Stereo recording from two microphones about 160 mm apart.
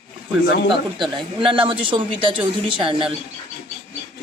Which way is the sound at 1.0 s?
30° right (ahead or behind).